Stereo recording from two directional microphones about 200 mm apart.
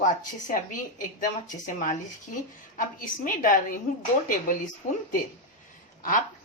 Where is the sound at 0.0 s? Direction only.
40° left (ahead or behind).